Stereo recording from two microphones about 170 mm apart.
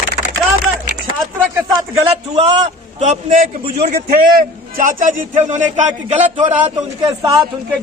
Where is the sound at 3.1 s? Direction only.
45° right (ahead or behind).